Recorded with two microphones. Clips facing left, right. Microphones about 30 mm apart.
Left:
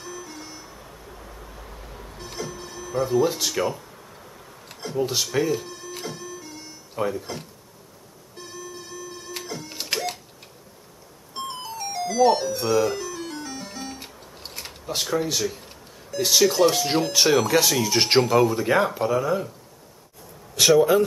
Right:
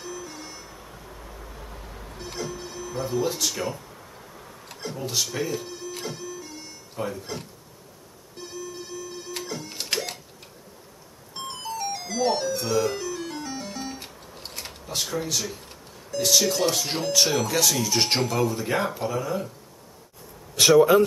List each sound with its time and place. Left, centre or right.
0.0 s vehicle: centre
3.3 s speech: centre
4.5 s a sound: centre
5.0 s music: centre
7.0 s speech: centre
8.4 s music: centre
11.3 s music: centre
14.9 s speech: centre
20.5 s speech: centre